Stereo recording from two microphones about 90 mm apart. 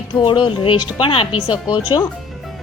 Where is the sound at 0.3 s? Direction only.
70° left (ahead or behind).